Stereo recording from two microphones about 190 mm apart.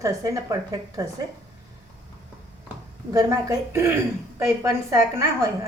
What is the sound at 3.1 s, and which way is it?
A woman's voice, 15° right (ahead or behind).